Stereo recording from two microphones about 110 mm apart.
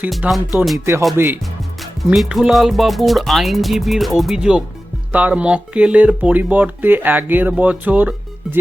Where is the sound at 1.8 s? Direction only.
Centre (ahead or behind).